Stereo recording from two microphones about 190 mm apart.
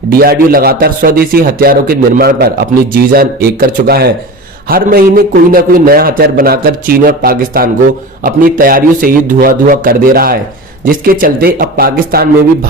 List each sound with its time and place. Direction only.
0.1 s a man's voice: 50° right (ahead or behind)